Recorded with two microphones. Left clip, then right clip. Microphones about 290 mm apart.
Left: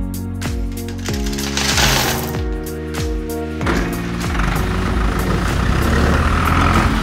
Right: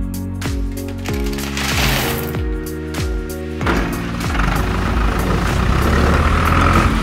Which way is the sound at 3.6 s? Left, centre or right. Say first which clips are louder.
Right 3 dB; centre.